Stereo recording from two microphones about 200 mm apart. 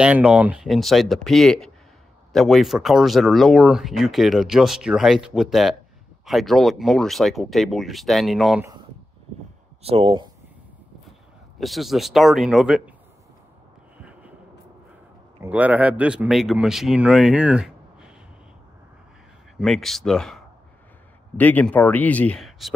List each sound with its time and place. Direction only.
0.0 s speech: 5° right (ahead or behind)
9.8 s speech: 25° right (ahead or behind)
11.6 s speech: centre (ahead or behind)
15.4 s speech: 5° right (ahead or behind)
19.6 s speech: centre (ahead or behind)
21.4 s speech: 10° left (ahead or behind)